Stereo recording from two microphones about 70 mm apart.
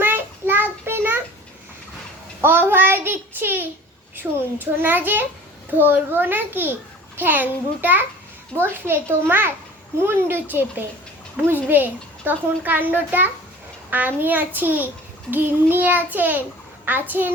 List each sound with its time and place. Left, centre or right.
0.0 s child singing: right
2.4 s a child's voice: right